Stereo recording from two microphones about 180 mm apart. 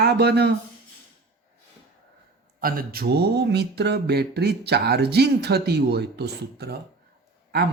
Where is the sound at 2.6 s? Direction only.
55° right (ahead or behind).